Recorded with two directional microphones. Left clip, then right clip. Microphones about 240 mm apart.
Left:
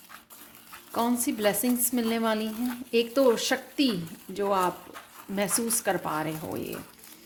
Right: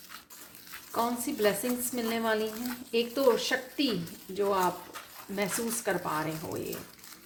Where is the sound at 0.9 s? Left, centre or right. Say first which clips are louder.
Left 3 dB; left.